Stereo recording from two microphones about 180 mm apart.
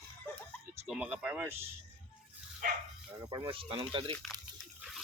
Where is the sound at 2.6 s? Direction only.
50° right (ahead or behind).